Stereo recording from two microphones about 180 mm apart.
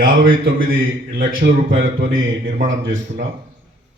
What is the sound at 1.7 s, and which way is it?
Speech, 90° right.